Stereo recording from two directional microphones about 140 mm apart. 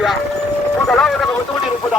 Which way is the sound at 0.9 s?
5° left (ahead or behind).